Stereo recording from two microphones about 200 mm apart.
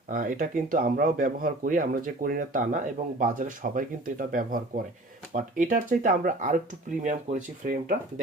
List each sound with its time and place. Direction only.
0.1 s speech: 45° right (ahead or behind)